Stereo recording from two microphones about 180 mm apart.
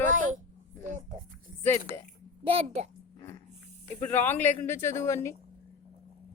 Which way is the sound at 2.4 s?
40° right (ahead or behind).